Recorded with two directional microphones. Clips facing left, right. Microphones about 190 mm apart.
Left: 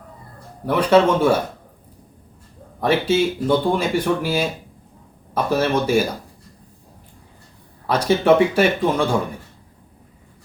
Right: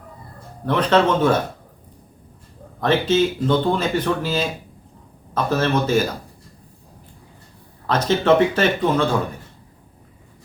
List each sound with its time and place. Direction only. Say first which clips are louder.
0.6 s speech: left 2 dB; 10° left (ahead or behind)
2.8 s speech: even; 10° left (ahead or behind)
7.9 s speech: left 1 dB; 10° left (ahead or behind)